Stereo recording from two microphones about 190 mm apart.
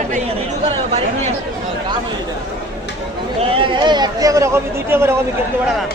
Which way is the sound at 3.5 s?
25° right (ahead or behind).